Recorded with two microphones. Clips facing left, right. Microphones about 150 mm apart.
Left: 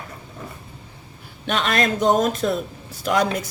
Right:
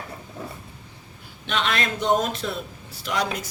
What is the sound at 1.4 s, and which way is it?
Speech, 45° left (ahead or behind).